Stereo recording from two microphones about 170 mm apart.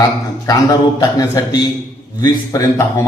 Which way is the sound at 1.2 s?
20° left (ahead or behind).